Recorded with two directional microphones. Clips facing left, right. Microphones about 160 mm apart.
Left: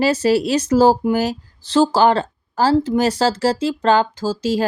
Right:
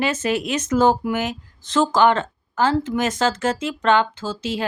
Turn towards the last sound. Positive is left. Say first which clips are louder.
# left 7 dB
turn(degrees=40)  # may be behind; listen again after turning